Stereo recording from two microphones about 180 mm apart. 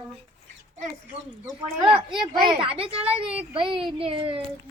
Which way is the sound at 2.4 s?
30° right (ahead or behind).